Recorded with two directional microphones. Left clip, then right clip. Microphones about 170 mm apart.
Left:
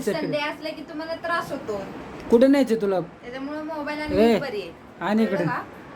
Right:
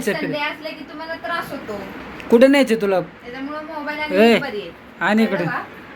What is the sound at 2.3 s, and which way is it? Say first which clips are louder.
Speech: right 5 dB; 5° left (ahead or behind).